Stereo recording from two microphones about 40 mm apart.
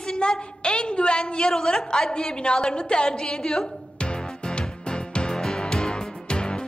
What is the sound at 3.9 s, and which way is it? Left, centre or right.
Music, left.